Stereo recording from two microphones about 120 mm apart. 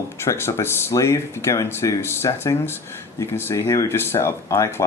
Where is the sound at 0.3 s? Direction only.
25° left (ahead or behind).